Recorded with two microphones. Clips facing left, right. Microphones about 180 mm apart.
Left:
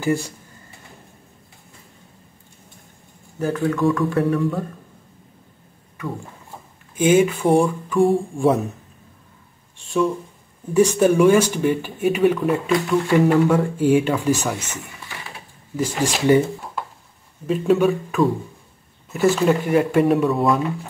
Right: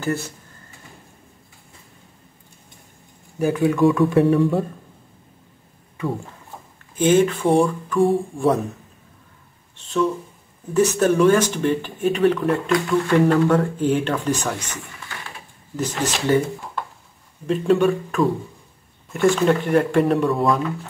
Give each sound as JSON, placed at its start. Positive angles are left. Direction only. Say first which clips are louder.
{"t": 0.0, "sound": "speech", "louder": "left 3 dB", "side_deg": 10}
{"t": 3.3, "sound": "speech", "louder": "right 2 dB", "side_deg": -10}
{"t": 4.1, "sound": "speech", "louder": "right 4 dB", "side_deg": -25}
{"t": 7.0, "sound": "speech", "louder": "left 1 dB", "side_deg": 10}
{"t": 9.8, "sound": "speech", "louder": "left 1 dB", "side_deg": 10}
{"t": 15.7, "sound": "speech", "louder": "left 2 dB", "side_deg": 10}
{"t": 17.5, "sound": "speech", "louder": "even", "side_deg": 0}